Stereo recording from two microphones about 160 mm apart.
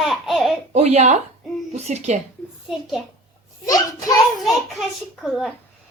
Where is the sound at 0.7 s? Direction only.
45° right (ahead or behind).